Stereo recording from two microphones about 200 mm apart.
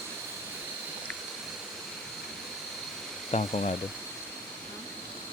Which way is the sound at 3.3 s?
35° left (ahead or behind).